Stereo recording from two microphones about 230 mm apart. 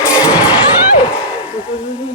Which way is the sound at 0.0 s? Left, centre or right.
Centre.